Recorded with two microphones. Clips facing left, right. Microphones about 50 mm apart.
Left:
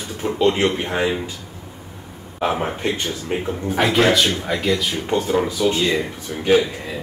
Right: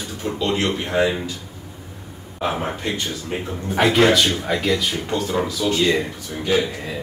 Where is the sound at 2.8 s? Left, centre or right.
Left.